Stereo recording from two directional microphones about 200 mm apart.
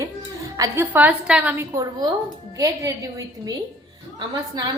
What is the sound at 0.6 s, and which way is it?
A woman's voice, 10° right (ahead or behind).